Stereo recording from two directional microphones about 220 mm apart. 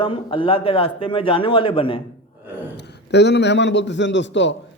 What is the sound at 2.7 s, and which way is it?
A man's voice, 50° left (ahead or behind).